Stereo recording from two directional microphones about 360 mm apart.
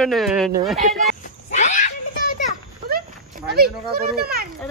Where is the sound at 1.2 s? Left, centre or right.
Left.